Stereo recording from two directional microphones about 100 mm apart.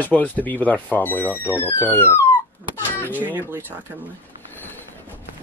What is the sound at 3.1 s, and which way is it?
Speech, 20° right (ahead or behind).